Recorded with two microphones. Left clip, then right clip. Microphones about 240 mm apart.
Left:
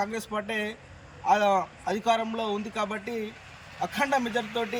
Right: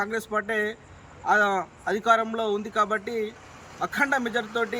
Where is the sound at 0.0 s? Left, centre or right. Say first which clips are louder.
Right 3 dB; centre.